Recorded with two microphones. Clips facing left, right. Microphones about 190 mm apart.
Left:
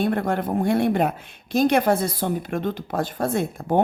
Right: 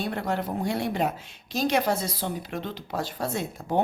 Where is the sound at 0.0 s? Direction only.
55° left (ahead or behind).